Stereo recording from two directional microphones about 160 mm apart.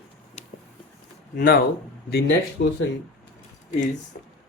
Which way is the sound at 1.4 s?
70° left (ahead or behind).